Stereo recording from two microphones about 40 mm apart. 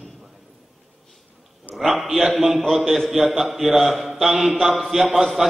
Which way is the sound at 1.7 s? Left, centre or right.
Left.